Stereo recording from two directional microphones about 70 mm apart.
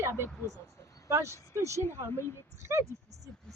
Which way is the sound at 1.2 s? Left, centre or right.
Left.